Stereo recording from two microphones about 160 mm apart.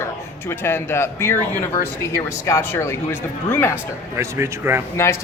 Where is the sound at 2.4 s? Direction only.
15° left (ahead or behind).